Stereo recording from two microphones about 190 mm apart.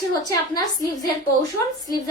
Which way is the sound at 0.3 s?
20° left (ahead or behind).